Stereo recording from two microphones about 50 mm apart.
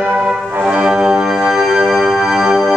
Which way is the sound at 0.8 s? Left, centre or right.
Centre.